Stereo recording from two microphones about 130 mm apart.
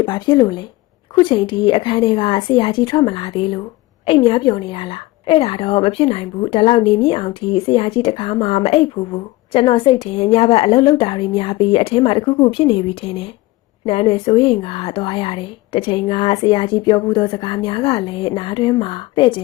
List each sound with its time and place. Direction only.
0.0 s a woman's voice: 35° left (ahead or behind)